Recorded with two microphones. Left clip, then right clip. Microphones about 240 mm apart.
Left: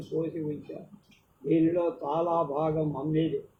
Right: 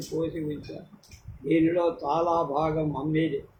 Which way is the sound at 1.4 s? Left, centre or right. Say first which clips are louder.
Right 2 dB; right.